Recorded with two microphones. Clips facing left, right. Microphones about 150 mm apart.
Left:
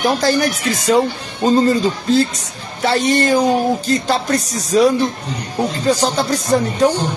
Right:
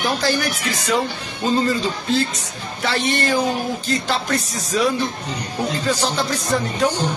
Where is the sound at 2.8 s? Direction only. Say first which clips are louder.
Left 6 dB; 40° left (ahead or behind).